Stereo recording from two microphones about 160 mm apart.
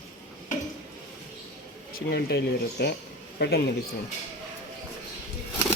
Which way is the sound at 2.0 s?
85° left.